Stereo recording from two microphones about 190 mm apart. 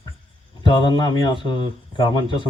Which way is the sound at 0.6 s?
25° left (ahead or behind).